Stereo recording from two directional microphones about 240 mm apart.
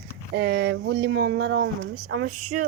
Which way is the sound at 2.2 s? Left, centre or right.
Right.